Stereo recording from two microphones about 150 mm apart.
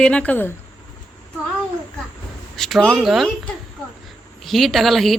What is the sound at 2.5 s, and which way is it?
Speech, 5° left (ahead or behind).